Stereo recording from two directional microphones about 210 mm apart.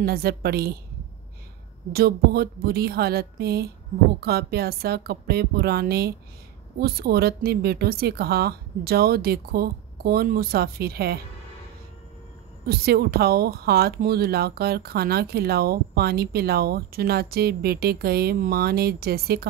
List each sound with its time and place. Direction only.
0.0 s speech: 45° right (ahead or behind)
1.9 s speech: 45° right (ahead or behind)
12.6 s speech: 50° right (ahead or behind)